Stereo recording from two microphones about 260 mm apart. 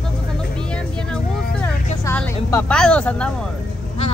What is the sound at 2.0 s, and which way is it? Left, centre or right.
A woman's voice, centre.